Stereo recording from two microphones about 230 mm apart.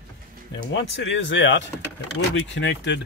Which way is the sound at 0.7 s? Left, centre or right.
Left.